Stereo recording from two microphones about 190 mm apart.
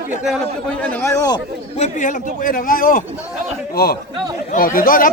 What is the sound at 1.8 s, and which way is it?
A man's voice, 40° left (ahead or behind).